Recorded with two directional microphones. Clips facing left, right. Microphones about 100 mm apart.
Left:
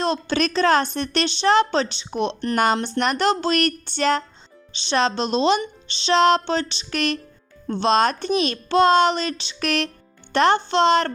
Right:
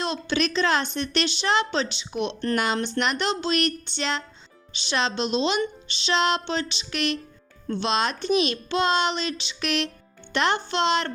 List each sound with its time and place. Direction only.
0.0 s a woman's voice: 40° left (ahead or behind)
4.7 s a woman's voice: 30° left (ahead or behind)